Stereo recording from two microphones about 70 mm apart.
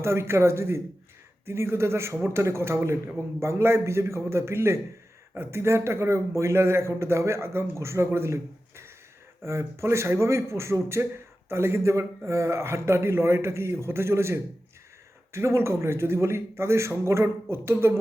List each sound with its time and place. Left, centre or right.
0.0 s a man's voice: right